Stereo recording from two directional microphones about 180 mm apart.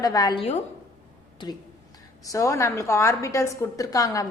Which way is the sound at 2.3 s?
15° left (ahead or behind).